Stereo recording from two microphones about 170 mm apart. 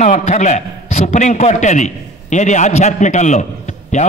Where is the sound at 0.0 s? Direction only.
40° left (ahead or behind).